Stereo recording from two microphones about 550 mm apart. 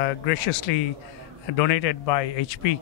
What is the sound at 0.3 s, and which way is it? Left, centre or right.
Speech, left.